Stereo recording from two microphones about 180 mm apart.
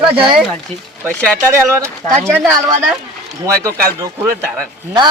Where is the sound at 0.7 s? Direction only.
35° right (ahead or behind).